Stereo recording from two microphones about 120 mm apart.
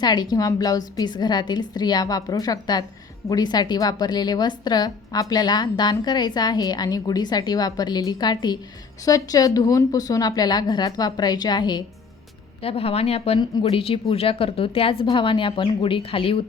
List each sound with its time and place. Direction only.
0.0 s a woman's voice: 35° left (ahead or behind)
12.6 s a woman's voice: 55° left (ahead or behind)